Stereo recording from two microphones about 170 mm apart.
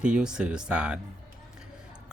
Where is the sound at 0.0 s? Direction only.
5° right (ahead or behind).